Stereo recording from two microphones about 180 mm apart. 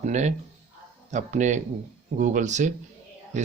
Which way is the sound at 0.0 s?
40° right (ahead or behind).